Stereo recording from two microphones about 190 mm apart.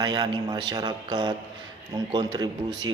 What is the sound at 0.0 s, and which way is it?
A man's voice, 25° right (ahead or behind).